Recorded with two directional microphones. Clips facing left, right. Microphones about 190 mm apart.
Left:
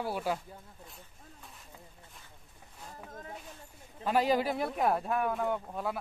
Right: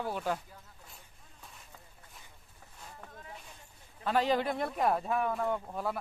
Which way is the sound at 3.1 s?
40° left (ahead or behind).